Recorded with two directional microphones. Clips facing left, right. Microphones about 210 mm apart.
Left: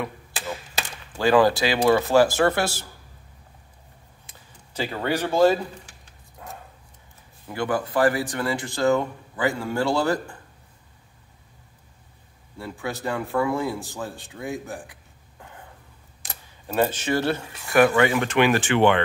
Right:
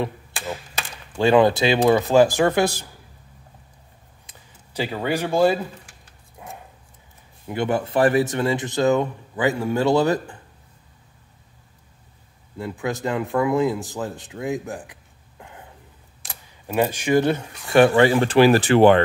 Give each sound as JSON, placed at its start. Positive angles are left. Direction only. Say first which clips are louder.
{"t": 1.1, "sound": "speech", "louder": "right 2 dB", "side_deg": -20}
{"t": 4.7, "sound": "speech", "louder": "right 2 dB", "side_deg": -10}
{"t": 6.4, "sound": "dog", "louder": "right 1 dB", "side_deg": -15}
{"t": 7.4, "sound": "speech", "louder": "right 3 dB", "side_deg": -25}
{"t": 12.5, "sound": "speech", "louder": "right 5 dB", "side_deg": -20}
{"t": 16.2, "sound": "keys jangling", "louder": "even", "side_deg": 0}
{"t": 16.6, "sound": "speech", "louder": "right 2 dB", "side_deg": -10}